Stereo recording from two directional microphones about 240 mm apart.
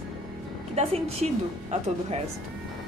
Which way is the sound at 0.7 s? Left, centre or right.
Right.